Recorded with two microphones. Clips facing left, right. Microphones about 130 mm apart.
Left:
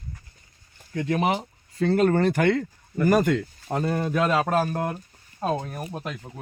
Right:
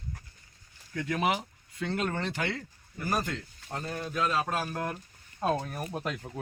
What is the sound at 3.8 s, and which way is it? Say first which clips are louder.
Speech: left 8 dB; 90° left.